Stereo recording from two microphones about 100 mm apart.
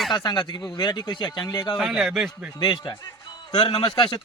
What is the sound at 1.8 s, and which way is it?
Speech, 5° right (ahead or behind).